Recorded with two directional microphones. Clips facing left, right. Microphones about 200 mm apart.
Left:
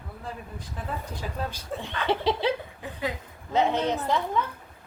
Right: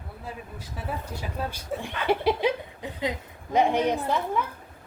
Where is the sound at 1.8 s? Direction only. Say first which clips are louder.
Right 1 dB; 10° right (ahead or behind).